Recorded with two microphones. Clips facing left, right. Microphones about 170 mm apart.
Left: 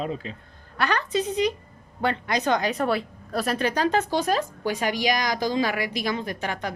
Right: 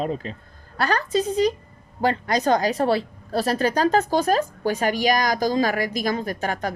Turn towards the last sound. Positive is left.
turn(degrees=-45)  # may be behind; listen again after turning